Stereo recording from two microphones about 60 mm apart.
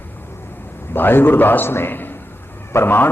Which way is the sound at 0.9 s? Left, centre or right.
Left.